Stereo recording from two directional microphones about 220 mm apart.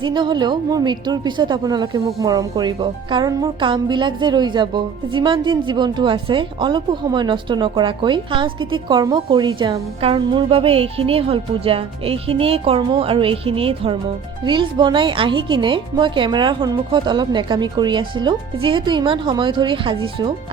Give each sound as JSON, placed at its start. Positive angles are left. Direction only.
{"t": 0.0, "sound": "a woman's voice", "side_deg": -20}